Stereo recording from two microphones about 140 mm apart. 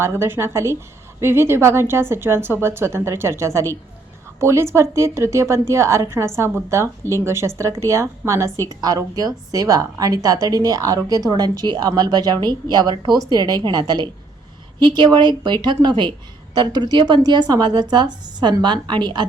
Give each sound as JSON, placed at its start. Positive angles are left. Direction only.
{"t": 0.0, "sound": "a woman's voice", "side_deg": -15}